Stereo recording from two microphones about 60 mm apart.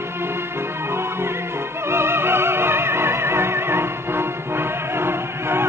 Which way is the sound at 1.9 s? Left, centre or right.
Right.